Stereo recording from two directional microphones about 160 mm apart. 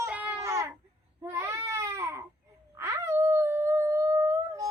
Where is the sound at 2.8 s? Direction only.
15° right (ahead or behind).